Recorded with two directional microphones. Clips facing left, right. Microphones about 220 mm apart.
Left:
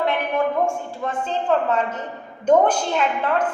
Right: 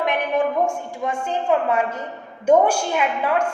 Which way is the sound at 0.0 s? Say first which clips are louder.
Right 1 dB; 15° right (ahead or behind).